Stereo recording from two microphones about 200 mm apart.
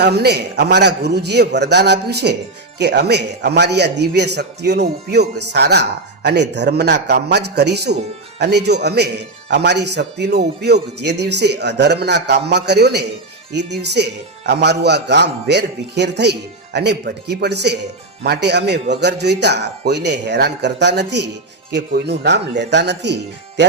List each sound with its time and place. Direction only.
0.0 s a man's voice: 55° right (ahead or behind)